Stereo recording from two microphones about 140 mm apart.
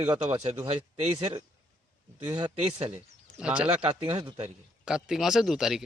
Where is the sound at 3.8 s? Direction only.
40° right (ahead or behind).